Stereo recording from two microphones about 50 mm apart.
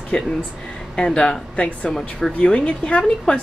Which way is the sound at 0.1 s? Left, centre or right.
Left.